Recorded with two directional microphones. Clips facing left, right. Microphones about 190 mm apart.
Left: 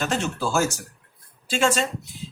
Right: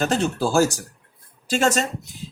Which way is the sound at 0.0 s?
35° right (ahead or behind).